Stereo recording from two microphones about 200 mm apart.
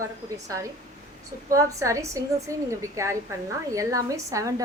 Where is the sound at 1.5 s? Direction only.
15° right (ahead or behind).